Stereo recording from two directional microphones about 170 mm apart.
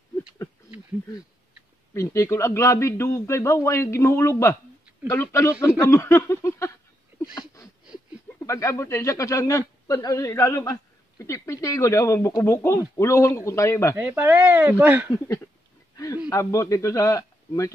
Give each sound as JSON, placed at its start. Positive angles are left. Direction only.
{"t": 2.0, "sound": "a man's voice", "side_deg": 15}
{"t": 7.3, "sound": "a sound", "side_deg": 20}
{"t": 8.5, "sound": "a man's voice", "side_deg": 15}
{"t": 13.9, "sound": "speech", "side_deg": -10}
{"t": 15.0, "sound": "a man's voice", "side_deg": 15}